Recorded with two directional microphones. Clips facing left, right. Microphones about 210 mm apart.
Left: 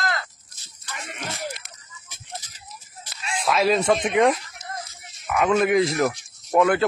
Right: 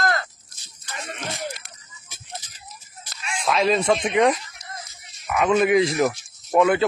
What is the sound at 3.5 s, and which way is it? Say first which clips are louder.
Speech: even; centre (ahead or behind).